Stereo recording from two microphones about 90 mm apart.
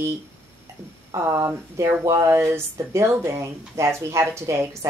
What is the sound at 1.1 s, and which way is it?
Speech, 35° right (ahead or behind).